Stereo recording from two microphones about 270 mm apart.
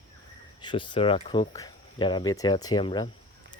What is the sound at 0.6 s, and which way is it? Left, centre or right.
Speech, centre.